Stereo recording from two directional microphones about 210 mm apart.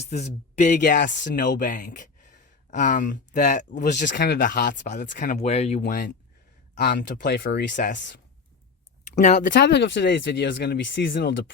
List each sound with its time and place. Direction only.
0.0 s speech: 35° left (ahead or behind)
6.7 s speech: 50° left (ahead or behind)
7.7 s speech: 40° left (ahead or behind)
9.2 s speech: 40° left (ahead or behind); by 11.5 s 55° left (ahead or behind)